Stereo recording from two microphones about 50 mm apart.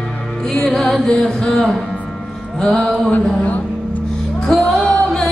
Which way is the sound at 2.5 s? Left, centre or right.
Left.